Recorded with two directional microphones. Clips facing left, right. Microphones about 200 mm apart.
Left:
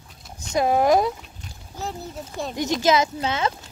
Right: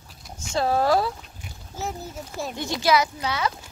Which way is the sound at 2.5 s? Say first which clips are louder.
Left 2 dB; 20° left (ahead or behind).